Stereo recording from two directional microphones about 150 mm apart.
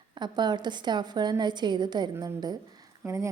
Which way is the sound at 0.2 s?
30° right (ahead or behind).